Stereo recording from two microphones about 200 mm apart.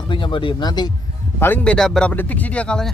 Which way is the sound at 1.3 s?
10° left (ahead or behind).